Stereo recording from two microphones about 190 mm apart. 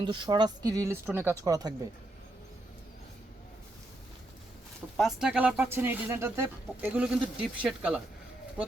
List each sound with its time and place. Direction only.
0.0 s speech: 25° right (ahead or behind)
4.9 s speech: centre (ahead or behind)